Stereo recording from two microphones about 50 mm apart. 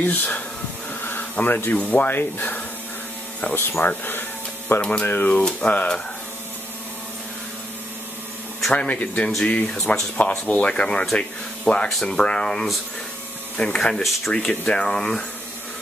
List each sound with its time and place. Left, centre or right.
0.0 s speech: left
2.0 s speech: left
3.5 s a sound: left
5.0 s speech: left
8.7 s speech: left
10.5 s speech: left